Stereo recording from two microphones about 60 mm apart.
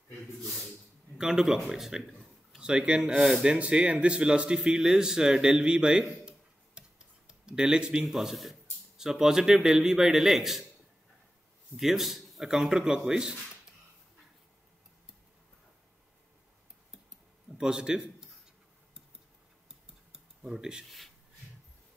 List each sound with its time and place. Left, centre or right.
1.1 s speech: centre
3.5 s speech: right
6.8 s tick-tock: centre
7.2 s a man's voice: centre
11.7 s speech: centre
17.6 s speech: centre
20.1 s cutlery: centre